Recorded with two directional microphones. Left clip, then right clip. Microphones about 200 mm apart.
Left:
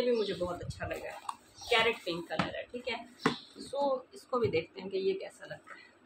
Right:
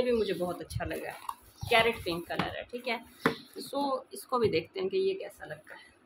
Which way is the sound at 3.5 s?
60° right (ahead or behind).